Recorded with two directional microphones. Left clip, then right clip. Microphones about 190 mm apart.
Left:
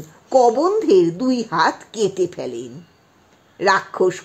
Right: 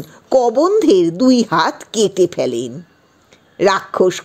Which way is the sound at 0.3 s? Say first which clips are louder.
Right 2 dB; 35° right (ahead or behind).